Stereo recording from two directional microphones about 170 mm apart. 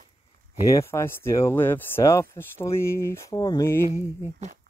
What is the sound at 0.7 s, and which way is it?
Speech, 15° left (ahead or behind).